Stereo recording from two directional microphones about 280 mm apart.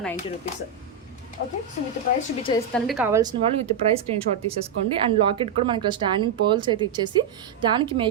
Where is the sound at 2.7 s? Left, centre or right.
Centre.